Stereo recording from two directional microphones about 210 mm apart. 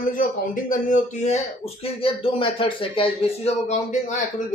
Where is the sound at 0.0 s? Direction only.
40° left (ahead or behind).